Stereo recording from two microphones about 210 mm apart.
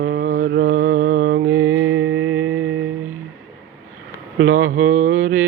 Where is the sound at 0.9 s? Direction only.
45° right (ahead or behind).